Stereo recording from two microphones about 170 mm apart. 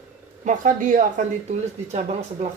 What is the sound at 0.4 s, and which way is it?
Speech, 50° right (ahead or behind).